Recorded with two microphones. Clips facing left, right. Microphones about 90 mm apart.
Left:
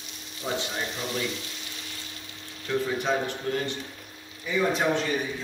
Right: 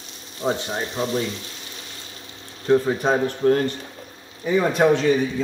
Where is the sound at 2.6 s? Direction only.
35° right (ahead or behind).